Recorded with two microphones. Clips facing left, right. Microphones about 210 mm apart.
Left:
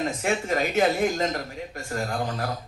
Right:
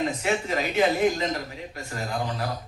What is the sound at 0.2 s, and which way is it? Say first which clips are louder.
Speech: left 1 dB; 45° left (ahead or behind).